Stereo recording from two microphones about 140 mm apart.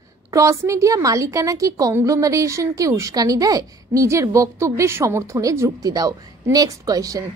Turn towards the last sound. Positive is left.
turn(degrees=-25)  # may be behind; listen again after turning